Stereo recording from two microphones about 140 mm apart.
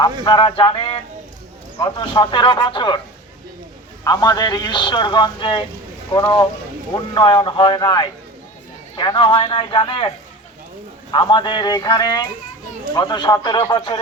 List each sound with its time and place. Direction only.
0.0 s a man's voice: 30° left (ahead or behind)
4.0 s a man's voice: 25° left (ahead or behind)
11.1 s a man's voice: 35° left (ahead or behind)